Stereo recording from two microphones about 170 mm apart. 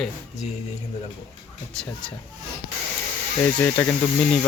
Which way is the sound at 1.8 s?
5° left (ahead or behind).